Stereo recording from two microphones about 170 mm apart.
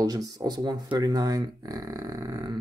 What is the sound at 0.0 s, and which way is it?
Speech, 20° right (ahead or behind).